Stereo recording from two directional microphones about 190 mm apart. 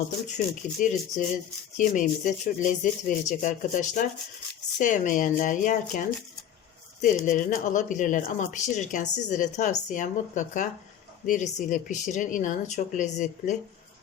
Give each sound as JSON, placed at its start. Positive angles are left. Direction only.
{"t": 0.3, "sound": "speech", "side_deg": 40}